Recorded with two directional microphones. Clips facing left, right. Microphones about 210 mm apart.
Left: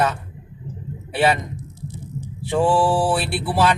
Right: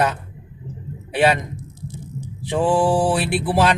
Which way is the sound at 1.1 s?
15° right (ahead or behind).